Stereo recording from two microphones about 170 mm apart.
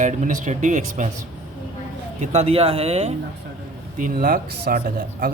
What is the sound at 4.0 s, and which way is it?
Speech, 55° right (ahead or behind).